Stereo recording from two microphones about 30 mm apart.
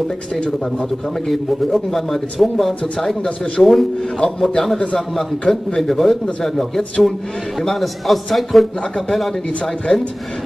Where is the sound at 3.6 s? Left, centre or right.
Centre.